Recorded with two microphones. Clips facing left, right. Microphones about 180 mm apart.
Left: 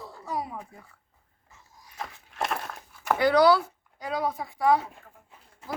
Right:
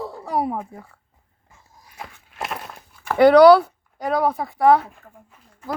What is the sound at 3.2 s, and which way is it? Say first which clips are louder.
Speech: right 10 dB; 65° right (ahead or behind).